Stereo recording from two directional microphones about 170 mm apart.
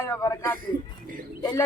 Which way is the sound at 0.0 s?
20° left (ahead or behind).